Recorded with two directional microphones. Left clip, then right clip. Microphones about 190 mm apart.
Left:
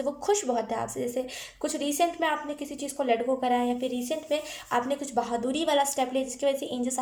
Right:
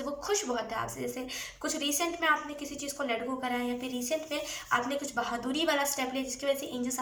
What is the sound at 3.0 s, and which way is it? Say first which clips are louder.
A woman's voice: left 8 dB; 35° left (ahead or behind).